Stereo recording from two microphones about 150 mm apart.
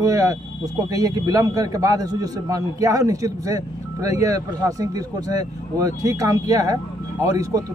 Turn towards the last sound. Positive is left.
turn(degrees=-20)  # may be behind; listen again after turning